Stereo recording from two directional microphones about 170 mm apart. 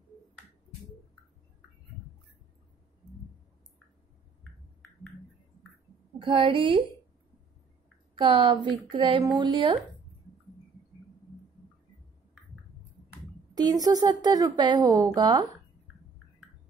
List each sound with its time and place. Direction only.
6.1 s a woman's voice: 30° right (ahead or behind)
8.2 s a woman's voice: 30° right (ahead or behind)
13.6 s a woman's voice: 20° right (ahead or behind)